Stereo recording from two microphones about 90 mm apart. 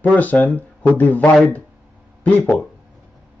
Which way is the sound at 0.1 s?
15° left (ahead or behind).